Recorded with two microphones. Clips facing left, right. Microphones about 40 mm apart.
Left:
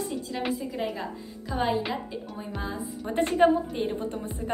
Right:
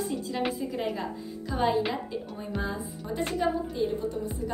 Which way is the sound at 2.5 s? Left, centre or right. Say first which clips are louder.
Right 2 dB; centre.